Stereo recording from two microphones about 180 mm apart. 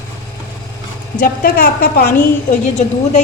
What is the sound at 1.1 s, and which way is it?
Speech, 55° left (ahead or behind).